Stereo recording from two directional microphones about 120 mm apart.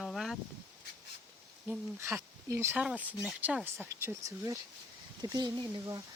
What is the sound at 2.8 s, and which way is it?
Speech, 10° right (ahead or behind).